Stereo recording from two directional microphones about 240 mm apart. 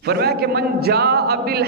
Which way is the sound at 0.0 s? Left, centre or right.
Right.